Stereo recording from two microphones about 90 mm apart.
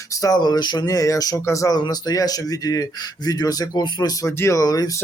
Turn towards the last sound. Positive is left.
turn(degrees=45)  # may be behind; listen again after turning